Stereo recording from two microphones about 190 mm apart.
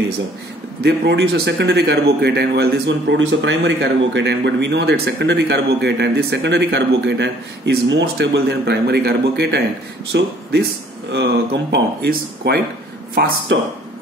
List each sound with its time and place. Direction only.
0.8 s a man's voice: 65° right (ahead or behind)